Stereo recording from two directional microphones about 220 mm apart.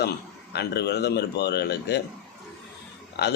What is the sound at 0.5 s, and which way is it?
A man's voice, 50° left (ahead or behind).